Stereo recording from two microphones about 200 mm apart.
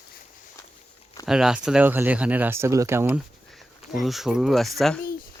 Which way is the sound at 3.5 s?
Centre (ahead or behind).